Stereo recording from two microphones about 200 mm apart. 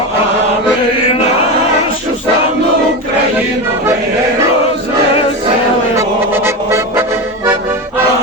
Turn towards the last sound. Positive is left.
turn(degrees=-10)  # may be behind; listen again after turning